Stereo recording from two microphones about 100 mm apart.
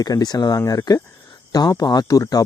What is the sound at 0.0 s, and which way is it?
Speech, 40° left (ahead or behind).